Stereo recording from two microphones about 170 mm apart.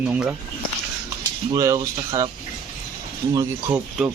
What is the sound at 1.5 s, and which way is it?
Speech, 20° right (ahead or behind).